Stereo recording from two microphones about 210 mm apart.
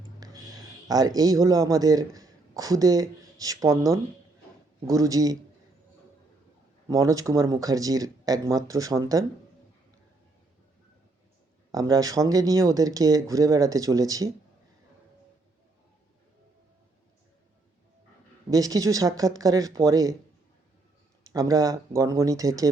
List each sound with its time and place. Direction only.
0.2 s speech: 15° right (ahead or behind)
6.8 s speech: 15° right (ahead or behind)
11.7 s speech: 15° right (ahead or behind)
18.5 s speech: 15° right (ahead or behind)
21.3 s speech: 15° right (ahead or behind)